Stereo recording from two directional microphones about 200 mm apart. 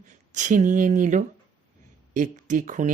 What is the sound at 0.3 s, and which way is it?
Speech, 40° right (ahead or behind).